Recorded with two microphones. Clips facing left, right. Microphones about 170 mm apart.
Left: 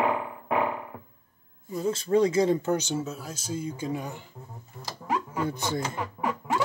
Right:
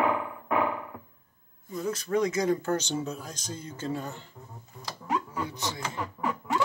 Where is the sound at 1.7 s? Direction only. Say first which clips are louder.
Left 4 dB; 25° left (ahead or behind).